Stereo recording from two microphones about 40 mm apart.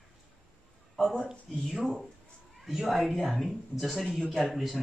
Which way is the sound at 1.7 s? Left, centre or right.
Centre.